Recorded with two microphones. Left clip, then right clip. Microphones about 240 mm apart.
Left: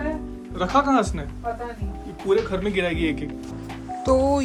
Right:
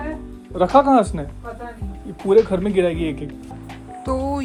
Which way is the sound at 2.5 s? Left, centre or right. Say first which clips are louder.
Right 5 dB; centre.